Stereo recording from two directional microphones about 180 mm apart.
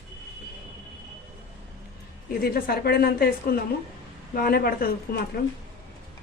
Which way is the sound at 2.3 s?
60° left (ahead or behind).